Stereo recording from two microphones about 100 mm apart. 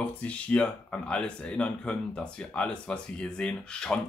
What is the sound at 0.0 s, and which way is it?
Speech, 15° left (ahead or behind).